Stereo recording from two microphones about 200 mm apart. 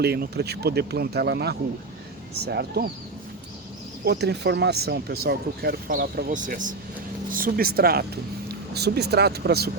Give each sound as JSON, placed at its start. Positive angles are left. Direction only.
{"t": 0.0, "sound": "speech", "side_deg": -55}
{"t": 4.0, "sound": "speech", "side_deg": -55}